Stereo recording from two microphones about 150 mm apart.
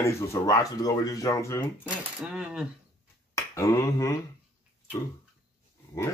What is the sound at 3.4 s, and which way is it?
Finger snapping, 20° left (ahead or behind).